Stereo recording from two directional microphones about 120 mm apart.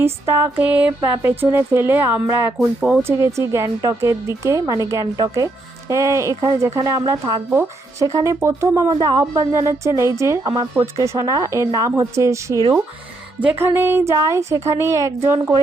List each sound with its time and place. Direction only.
0.0 s speech: 20° right (ahead or behind)
3.0 s speech: 20° right (ahead or behind)
7.5 s speech: 20° right (ahead or behind)